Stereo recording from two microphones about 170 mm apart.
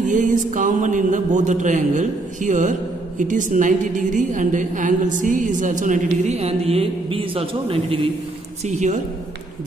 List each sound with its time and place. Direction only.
0.1 s a woman's voice: 50° right (ahead or behind)